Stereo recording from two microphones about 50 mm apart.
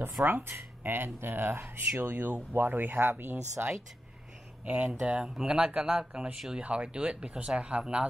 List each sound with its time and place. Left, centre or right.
0.2 s speech: right
3.6 s speech: right; by 6.6 s centre
6.6 s speech: right